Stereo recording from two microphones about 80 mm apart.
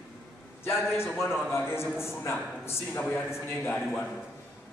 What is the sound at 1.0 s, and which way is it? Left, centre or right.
A man's voice, left.